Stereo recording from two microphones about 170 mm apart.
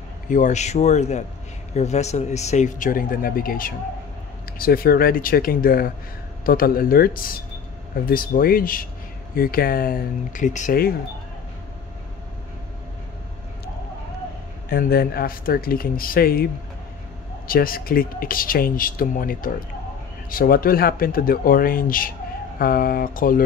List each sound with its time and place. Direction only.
0.3 s speech: 45° left (ahead or behind)
14.7 s speech: 60° left (ahead or behind)
17.5 s speech: 60° left (ahead or behind)